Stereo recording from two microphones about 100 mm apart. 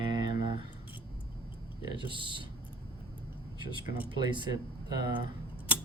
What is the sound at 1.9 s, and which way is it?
Speech, 55° right (ahead or behind).